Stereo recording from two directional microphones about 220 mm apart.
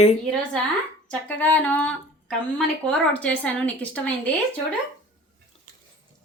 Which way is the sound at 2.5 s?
5° left (ahead or behind).